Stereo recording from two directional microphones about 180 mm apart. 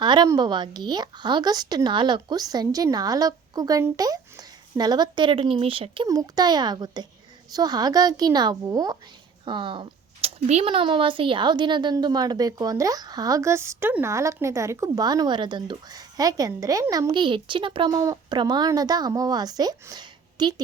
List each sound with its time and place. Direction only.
0.0 s speech: 25° right (ahead or behind)